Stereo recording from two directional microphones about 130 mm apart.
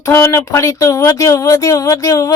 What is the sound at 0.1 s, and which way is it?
Speech, 20° left (ahead or behind).